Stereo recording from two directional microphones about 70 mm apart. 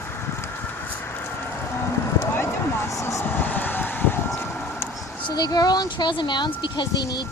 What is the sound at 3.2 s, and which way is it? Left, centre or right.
Vehicle, left.